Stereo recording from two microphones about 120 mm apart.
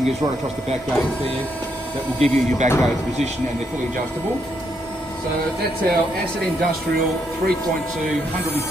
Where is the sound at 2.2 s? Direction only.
70° right (ahead or behind).